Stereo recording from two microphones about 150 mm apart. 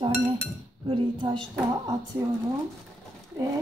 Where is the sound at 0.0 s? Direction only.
40° right (ahead or behind).